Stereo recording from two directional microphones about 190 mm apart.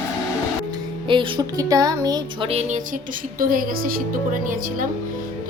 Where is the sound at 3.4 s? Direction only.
45° right (ahead or behind).